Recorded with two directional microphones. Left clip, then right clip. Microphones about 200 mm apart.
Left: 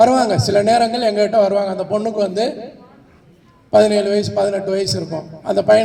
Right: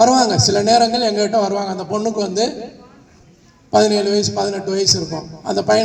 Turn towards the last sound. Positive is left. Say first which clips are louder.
# left 3 dB
turn(degrees=10)  # may be behind; listen again after turning